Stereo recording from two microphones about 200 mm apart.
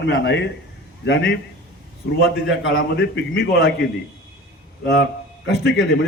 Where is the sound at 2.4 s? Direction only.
65° left (ahead or behind).